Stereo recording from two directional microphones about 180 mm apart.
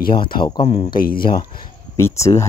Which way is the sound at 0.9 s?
55° left (ahead or behind).